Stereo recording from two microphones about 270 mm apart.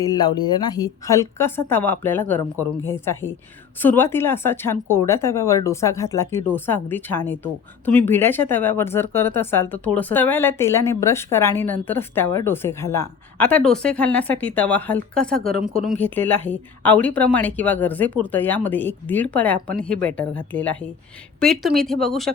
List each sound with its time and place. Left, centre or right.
0.0 s a woman's voice: centre